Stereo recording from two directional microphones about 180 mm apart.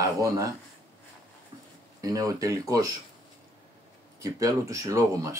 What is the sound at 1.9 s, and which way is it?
Speech, 20° right (ahead or behind).